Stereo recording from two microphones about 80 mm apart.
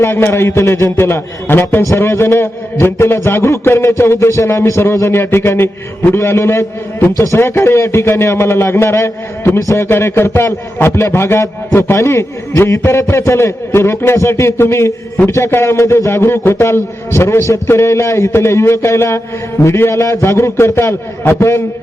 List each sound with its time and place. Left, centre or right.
0.0 s a man's voice: left
9.6 s a man's voice: left
9.9 s a man's voice: left